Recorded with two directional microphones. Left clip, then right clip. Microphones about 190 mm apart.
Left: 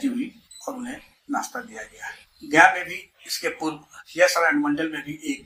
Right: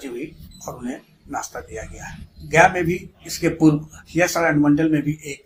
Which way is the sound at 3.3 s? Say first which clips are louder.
Right 9 dB; 45° right (ahead or behind).